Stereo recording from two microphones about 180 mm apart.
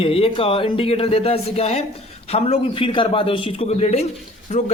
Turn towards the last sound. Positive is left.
turn(degrees=40)  # may be behind; listen again after turning